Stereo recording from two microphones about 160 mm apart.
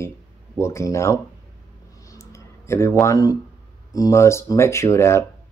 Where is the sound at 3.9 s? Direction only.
20° left (ahead or behind).